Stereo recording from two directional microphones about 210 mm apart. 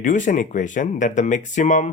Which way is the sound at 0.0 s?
35° left (ahead or behind).